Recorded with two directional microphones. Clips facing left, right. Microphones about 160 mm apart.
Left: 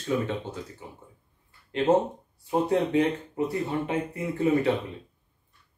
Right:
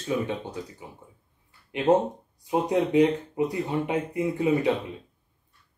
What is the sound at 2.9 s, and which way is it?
Speech, 15° right (ahead or behind).